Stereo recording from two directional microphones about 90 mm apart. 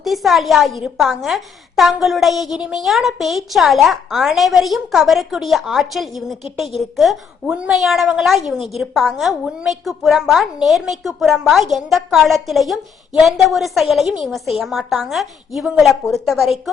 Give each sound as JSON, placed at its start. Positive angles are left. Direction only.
{"t": 0.0, "sound": "a woman's voice", "side_deg": 0}
{"t": 7.4, "sound": "a woman's voice", "side_deg": -10}
{"t": 7.7, "sound": "a woman's voice", "side_deg": 0}